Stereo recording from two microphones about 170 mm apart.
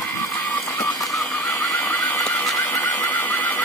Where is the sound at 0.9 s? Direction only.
20° left (ahead or behind).